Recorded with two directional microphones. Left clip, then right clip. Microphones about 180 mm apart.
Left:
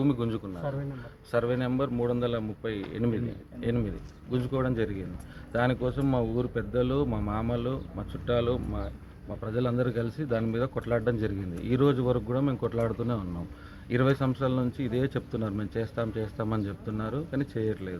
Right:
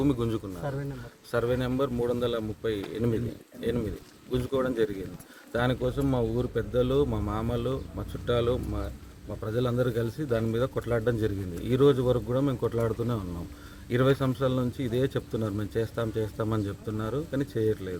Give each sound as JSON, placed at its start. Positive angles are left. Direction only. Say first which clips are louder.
{"t": 0.0, "sound": "a man's voice", "louder": "right 1 dB", "side_deg": -25}
{"t": 0.7, "sound": "speech", "louder": "left 1 dB", "side_deg": -90}
{"t": 1.3, "sound": "a man's voice", "louder": "even", "side_deg": -25}